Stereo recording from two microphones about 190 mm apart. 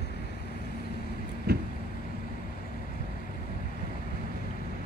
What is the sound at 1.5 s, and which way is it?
Vehicle, 55° right (ahead or behind).